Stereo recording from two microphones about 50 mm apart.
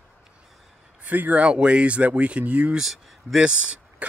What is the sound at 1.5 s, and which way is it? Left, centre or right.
Speech, right.